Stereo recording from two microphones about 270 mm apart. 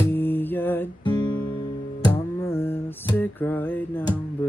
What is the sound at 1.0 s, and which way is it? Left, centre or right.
Guitar, centre.